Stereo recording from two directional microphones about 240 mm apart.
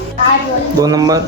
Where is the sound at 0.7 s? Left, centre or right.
Centre.